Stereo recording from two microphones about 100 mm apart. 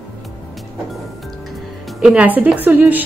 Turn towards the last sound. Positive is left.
turn(degrees=-15)  # may be behind; listen again after turning